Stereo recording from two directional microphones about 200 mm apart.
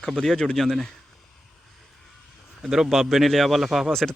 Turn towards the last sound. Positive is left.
turn(degrees=0)  # may be behind; listen again after turning